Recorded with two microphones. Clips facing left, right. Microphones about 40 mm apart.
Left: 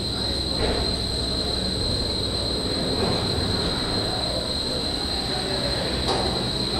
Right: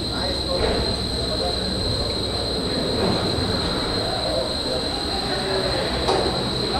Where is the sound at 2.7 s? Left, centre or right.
Centre.